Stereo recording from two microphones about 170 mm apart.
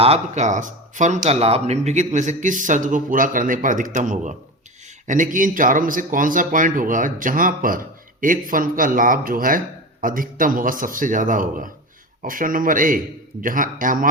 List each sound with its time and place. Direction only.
0.0 s speech: 40° right (ahead or behind)